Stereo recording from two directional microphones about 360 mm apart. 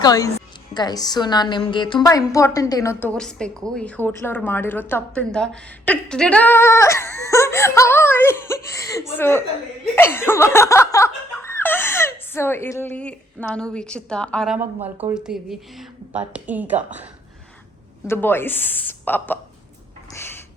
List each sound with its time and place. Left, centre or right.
0.0 s a woman's voice: centre
9.9 s laughter: centre
14.8 s speech: centre
15.1 s laughter: centre
18.1 s laughter: centre
20.1 s a sound: centre